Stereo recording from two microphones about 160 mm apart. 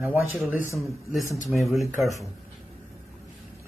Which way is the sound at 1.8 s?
20° right (ahead or behind).